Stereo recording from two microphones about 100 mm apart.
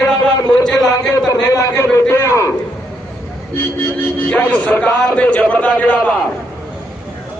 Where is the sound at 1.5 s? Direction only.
30° left (ahead or behind).